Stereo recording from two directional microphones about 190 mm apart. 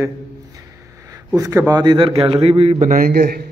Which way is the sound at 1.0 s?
15° right (ahead or behind).